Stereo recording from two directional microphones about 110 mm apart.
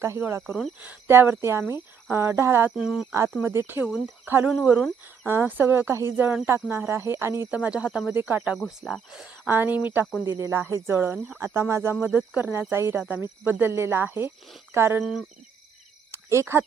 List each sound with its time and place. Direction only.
0.0 s speech: 25° right (ahead or behind)
2.7 s speech: 5° right (ahead or behind)
3.4 s speech: 20° right (ahead or behind)
7.5 s speech: 10° right (ahead or behind)
8.5 s speech: centre (ahead or behind)
9.5 s speech: 15° right (ahead or behind)
16.1 s speech: 25° right (ahead or behind)